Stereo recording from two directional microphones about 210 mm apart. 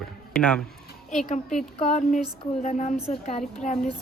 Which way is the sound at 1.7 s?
30° left (ahead or behind).